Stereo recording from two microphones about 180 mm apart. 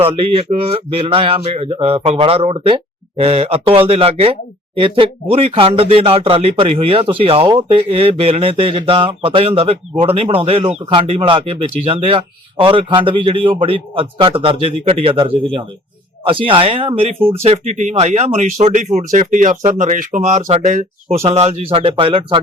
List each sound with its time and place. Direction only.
0.0 s speech: 30° right (ahead or behind)